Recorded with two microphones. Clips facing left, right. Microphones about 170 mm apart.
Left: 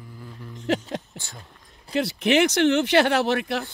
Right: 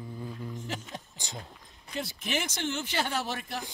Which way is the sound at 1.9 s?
75° left (ahead or behind).